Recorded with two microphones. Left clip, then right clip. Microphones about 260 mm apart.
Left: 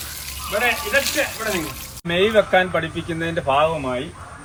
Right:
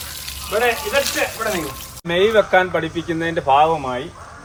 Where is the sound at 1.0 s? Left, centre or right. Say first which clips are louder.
Right 1 dB; centre.